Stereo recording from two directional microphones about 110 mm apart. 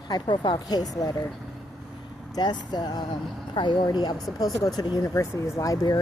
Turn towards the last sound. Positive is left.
turn(degrees=35)  # may be behind; listen again after turning